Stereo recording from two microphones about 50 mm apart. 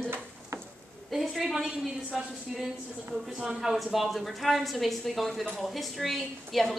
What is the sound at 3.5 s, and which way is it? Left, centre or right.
A woman's voice, centre.